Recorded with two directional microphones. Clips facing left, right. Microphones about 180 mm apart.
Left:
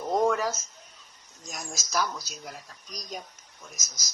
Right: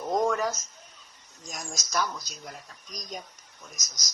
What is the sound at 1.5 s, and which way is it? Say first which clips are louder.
Speech: even; centre (ahead or behind).